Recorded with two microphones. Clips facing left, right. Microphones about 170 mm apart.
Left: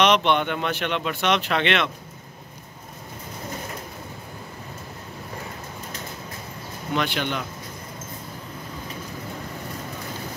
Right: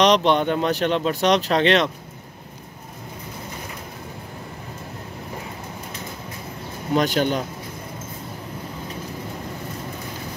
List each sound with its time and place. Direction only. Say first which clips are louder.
0.0 s speech: right 3 dB; 35° right (ahead or behind)
6.9 s speech: right 6 dB; 40° right (ahead or behind)